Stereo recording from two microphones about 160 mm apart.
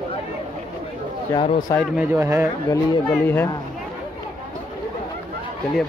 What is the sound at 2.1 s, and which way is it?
Speech, 15° right (ahead or behind).